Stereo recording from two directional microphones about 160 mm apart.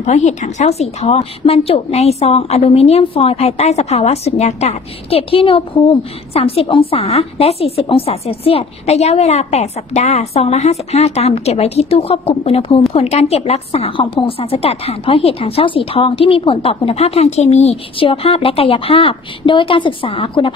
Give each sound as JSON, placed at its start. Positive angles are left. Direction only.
{"t": 0.0, "sound": "a woman's voice", "side_deg": 45}